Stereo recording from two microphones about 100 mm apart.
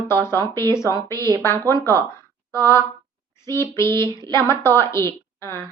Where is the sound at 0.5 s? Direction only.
30° left (ahead or behind).